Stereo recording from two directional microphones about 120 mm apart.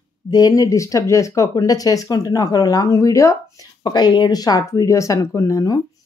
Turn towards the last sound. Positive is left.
turn(degrees=25)  # may be behind; listen again after turning